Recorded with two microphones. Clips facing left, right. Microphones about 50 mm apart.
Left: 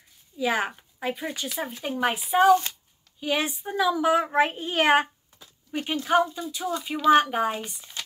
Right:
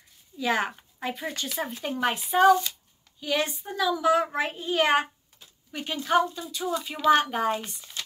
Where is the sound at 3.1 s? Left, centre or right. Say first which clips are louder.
Left 1 dB; centre.